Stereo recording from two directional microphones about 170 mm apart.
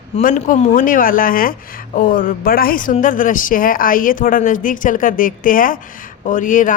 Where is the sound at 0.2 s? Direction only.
50° left (ahead or behind).